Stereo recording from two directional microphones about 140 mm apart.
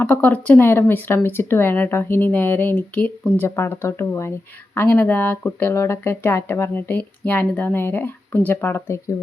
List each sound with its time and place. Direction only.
0.0 s speech: 10° left (ahead or behind)